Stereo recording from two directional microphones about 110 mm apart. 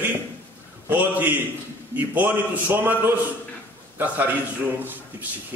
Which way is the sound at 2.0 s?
15° right (ahead or behind).